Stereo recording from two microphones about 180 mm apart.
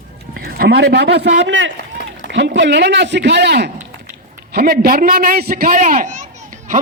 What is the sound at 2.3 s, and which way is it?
Speech, 75° right (ahead or behind).